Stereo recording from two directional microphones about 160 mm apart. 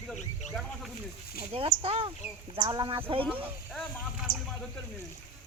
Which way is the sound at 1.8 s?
35° right (ahead or behind).